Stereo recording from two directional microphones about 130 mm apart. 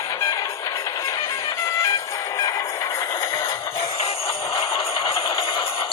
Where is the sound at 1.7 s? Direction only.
25° left (ahead or behind).